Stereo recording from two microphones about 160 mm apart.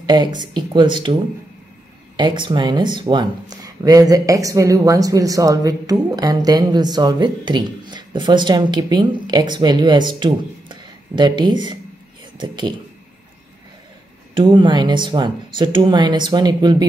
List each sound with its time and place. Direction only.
0.0 s speech: 25° right (ahead or behind)
2.1 s speech: 30° right (ahead or behind)
14.3 s speech: 30° right (ahead or behind)